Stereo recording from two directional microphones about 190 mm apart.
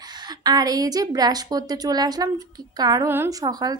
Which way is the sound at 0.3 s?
20° right (ahead or behind).